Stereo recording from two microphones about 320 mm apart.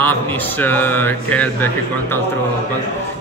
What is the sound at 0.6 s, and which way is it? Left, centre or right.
Speech, centre.